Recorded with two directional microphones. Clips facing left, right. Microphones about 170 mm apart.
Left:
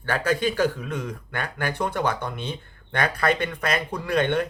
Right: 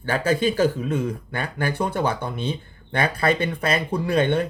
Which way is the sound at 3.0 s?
30° right (ahead or behind).